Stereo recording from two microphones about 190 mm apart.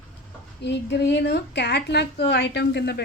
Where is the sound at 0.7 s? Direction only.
65° left (ahead or behind).